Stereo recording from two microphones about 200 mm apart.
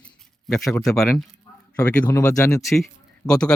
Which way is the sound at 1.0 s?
Centre (ahead or behind).